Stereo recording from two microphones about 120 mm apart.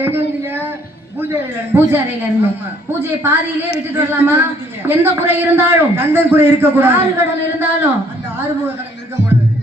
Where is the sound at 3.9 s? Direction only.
15° right (ahead or behind).